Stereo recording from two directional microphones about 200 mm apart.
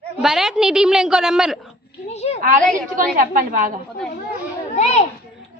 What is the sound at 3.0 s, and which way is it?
Speech, 40° right (ahead or behind).